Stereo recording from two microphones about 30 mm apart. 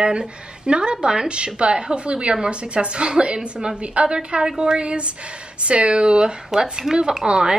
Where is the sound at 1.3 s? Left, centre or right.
Right.